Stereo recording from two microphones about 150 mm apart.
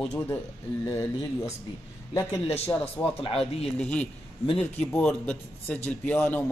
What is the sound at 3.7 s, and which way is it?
A man's voice, 10° left (ahead or behind).